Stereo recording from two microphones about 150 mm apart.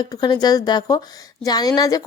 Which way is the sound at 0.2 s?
25° left (ahead or behind).